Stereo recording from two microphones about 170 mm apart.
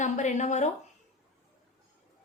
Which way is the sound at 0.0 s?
45° left (ahead or behind).